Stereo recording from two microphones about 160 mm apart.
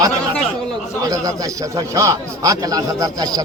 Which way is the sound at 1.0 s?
20° right (ahead or behind).